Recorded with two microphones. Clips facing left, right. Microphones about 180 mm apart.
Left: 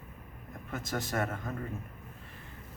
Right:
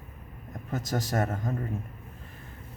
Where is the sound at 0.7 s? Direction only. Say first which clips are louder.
Right 4 dB; 40° right (ahead or behind).